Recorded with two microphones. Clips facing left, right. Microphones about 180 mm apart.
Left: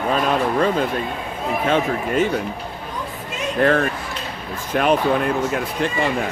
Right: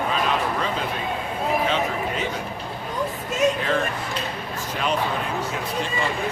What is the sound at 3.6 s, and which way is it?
Speech, 55° left (ahead or behind).